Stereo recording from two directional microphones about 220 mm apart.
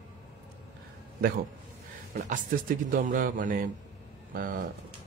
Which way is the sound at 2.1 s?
35° right (ahead or behind).